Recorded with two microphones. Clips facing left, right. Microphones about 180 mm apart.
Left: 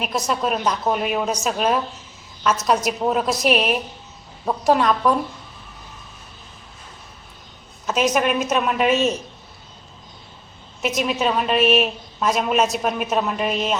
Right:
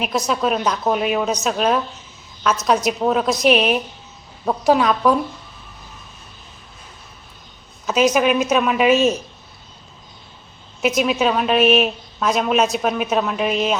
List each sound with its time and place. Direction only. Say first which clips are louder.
0.0 s a woman's voice: right 3 dB; centre (ahead or behind)
7.9 s a woman's voice: right 3 dB; centre (ahead or behind)
10.8 s a woman's voice: right 4 dB; centre (ahead or behind)